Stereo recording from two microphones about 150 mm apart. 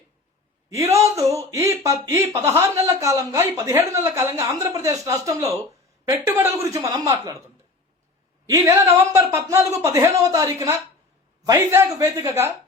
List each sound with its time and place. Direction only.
0.7 s speech: 20° right (ahead or behind)
8.4 s a man's voice: 20° right (ahead or behind)